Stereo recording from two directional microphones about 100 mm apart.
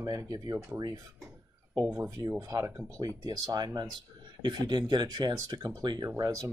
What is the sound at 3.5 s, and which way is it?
Speech, 45° right (ahead or behind).